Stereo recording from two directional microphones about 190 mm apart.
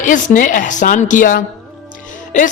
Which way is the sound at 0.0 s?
45° left (ahead or behind).